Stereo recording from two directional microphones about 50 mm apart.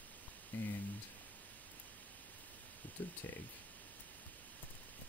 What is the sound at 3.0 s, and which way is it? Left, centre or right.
Speech, left.